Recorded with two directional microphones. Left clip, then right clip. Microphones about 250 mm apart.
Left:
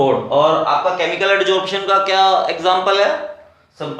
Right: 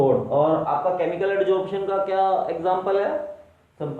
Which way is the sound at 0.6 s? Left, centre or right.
Centre.